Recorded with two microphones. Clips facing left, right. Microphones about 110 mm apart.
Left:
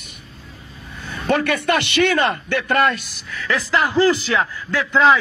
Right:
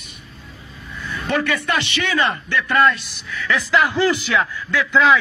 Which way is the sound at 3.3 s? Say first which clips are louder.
Right 1 dB; 40° left (ahead or behind).